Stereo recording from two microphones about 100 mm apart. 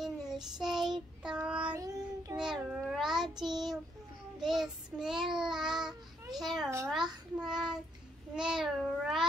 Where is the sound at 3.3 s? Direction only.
45° right (ahead or behind).